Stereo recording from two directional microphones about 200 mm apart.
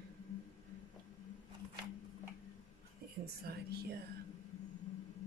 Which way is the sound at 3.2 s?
50° right (ahead or behind).